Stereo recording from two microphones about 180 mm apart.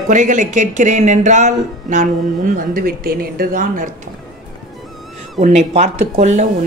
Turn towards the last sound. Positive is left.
turn(degrees=-40)  # may be behind; listen again after turning